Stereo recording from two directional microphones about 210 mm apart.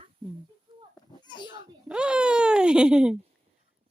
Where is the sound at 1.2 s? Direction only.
20° left (ahead or behind).